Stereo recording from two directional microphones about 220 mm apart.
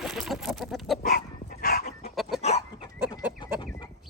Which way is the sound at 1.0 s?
40° left (ahead or behind).